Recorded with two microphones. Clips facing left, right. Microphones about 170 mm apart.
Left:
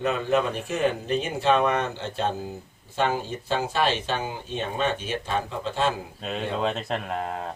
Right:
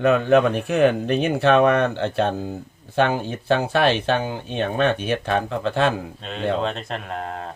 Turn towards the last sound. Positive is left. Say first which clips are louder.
# even
turn(degrees=5)  # may be behind; listen again after turning